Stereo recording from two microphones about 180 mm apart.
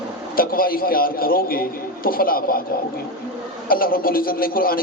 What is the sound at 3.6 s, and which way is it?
A man's voice, 55° left (ahead or behind).